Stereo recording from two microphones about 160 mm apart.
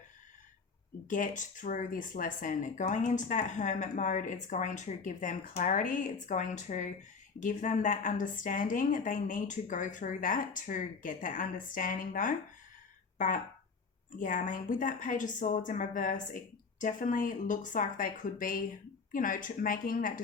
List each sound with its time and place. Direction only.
1.1 s a woman's voice: 55° left (ahead or behind)